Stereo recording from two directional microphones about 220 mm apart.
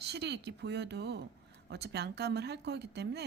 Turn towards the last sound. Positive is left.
turn(degrees=-50)  # may be behind; listen again after turning